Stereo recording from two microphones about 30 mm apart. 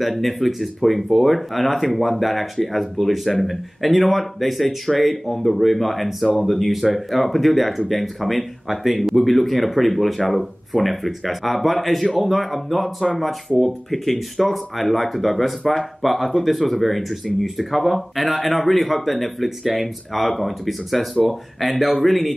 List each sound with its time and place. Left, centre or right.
0.0 s speech: centre